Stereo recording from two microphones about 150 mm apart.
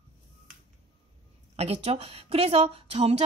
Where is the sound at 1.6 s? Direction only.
45° right (ahead or behind).